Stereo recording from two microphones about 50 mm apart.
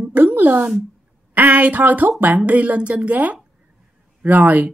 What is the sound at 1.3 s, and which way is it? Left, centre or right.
Speech, right.